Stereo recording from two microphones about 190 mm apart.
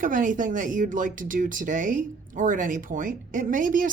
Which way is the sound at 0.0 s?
45° right (ahead or behind).